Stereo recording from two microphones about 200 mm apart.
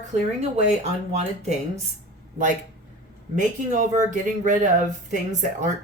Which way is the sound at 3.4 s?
40° right (ahead or behind).